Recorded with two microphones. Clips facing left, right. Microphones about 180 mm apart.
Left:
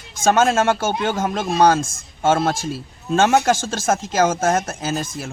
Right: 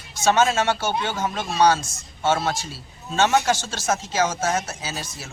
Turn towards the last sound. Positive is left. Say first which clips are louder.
# left 8 dB
turn(degrees=50)  # may be behind; listen again after turning